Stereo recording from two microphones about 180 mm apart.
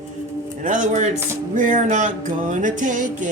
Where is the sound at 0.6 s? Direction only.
45° right (ahead or behind).